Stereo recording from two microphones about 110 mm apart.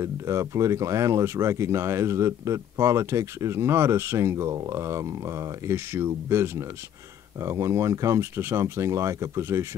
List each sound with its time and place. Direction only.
0.0 s speech: 30° right (ahead or behind)